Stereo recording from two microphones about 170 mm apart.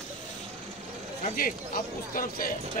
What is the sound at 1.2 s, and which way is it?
Speech, 55° left (ahead or behind).